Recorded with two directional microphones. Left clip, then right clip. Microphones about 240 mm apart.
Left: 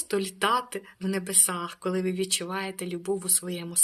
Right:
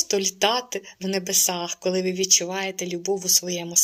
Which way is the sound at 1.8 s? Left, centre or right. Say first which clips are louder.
Right 7 dB; centre.